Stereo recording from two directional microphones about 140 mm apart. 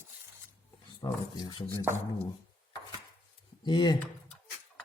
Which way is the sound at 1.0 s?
30° left (ahead or behind).